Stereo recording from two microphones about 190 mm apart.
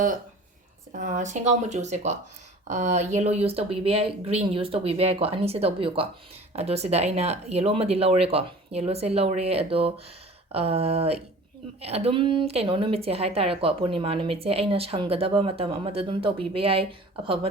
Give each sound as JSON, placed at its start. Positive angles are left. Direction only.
{"t": 0.9, "sound": "a woman's voice", "side_deg": -40}